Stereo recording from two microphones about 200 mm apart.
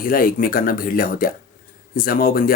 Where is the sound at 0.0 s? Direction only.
45° left (ahead or behind).